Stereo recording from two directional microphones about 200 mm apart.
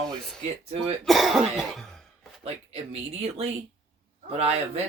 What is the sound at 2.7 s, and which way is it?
Speech, 30° right (ahead or behind).